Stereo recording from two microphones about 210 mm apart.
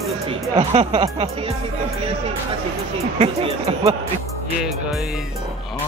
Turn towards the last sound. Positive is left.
turn(degrees=-30)  # may be behind; listen again after turning